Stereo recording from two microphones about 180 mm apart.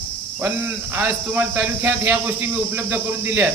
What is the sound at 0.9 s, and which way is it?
Speech, 10° right (ahead or behind).